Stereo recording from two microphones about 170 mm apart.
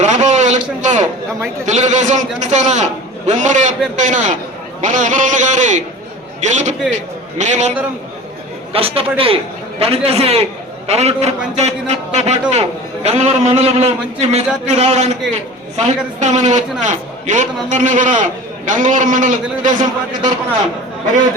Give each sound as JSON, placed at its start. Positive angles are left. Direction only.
{"t": 0.0, "sound": "a sound", "side_deg": -45}
{"t": 1.6, "sound": "a man's voice", "side_deg": -45}
{"t": 8.7, "sound": "a man's voice", "side_deg": -35}